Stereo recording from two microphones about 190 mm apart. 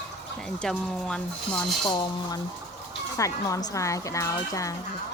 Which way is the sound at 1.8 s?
25° left (ahead or behind).